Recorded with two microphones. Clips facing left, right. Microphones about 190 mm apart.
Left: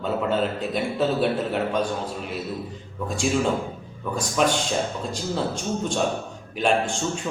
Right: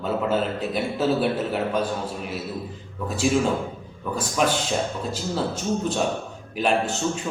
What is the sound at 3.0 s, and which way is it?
A man's voice, 5° right (ahead or behind).